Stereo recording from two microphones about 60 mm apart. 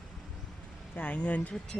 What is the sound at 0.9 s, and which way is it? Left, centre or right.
Speech, left.